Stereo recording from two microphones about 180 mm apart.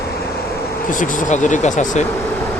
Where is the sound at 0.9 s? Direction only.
45° left (ahead or behind).